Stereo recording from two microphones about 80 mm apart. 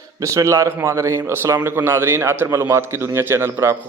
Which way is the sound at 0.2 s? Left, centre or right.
Right.